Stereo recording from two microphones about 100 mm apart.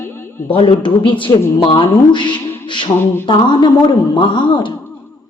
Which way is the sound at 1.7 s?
50° left (ahead or behind).